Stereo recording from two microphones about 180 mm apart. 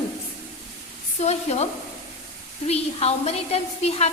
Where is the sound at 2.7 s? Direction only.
35° left (ahead or behind).